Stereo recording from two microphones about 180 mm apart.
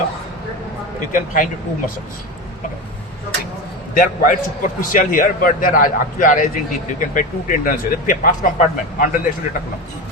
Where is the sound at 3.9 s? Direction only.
50° left (ahead or behind).